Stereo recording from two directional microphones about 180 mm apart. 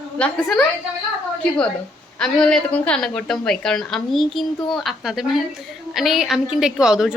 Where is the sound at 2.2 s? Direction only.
5° left (ahead or behind).